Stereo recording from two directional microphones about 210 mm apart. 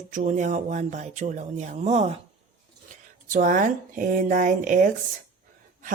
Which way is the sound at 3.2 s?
40° right (ahead or behind).